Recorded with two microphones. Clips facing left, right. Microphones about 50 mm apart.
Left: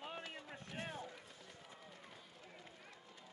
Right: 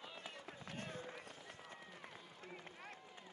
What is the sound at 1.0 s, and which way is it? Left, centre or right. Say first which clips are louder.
Run: right 1 dB; right.